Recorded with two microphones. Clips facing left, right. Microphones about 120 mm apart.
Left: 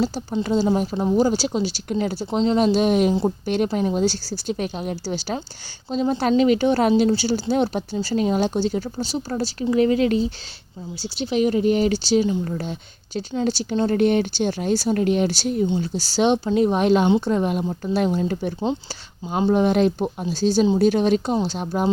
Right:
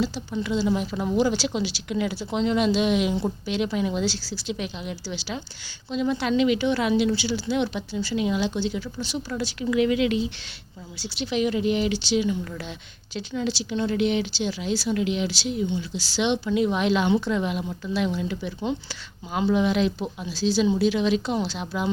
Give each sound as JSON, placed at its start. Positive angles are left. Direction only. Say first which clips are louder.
{"t": 0.0, "sound": "a woman's voice", "louder": "left 4 dB", "side_deg": 40}
{"t": 3.4, "sound": "a woman's voice", "louder": "left 4 dB", "side_deg": 50}